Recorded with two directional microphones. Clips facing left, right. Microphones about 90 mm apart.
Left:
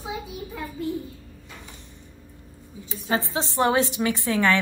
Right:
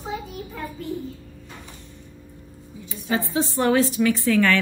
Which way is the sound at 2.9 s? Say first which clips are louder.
Right 1 dB; 30° left (ahead or behind).